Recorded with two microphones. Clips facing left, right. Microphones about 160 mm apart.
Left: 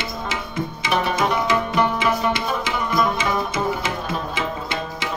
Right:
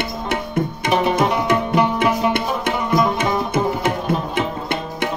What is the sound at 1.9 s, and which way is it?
Music, 60° right (ahead or behind).